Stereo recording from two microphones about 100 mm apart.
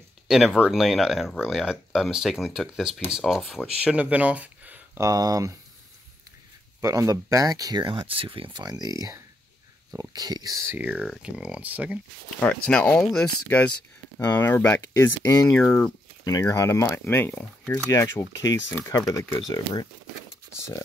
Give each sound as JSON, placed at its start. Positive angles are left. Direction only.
{"t": 0.3, "sound": "speech", "side_deg": 0}
{"t": 5.0, "sound": "speech", "side_deg": -35}
{"t": 6.8, "sound": "speech", "side_deg": -35}
{"t": 7.8, "sound": "speech", "side_deg": -60}
{"t": 8.6, "sound": "speech", "side_deg": -40}
{"t": 10.8, "sound": "speech", "side_deg": -10}
{"t": 12.4, "sound": "speech", "side_deg": 15}
{"t": 13.5, "sound": "speech", "side_deg": 20}
{"t": 14.6, "sound": "speech", "side_deg": 30}
{"t": 15.5, "sound": "speech", "side_deg": 10}
{"t": 16.3, "sound": "speech", "side_deg": 30}
{"t": 17.8, "sound": "speech", "side_deg": 25}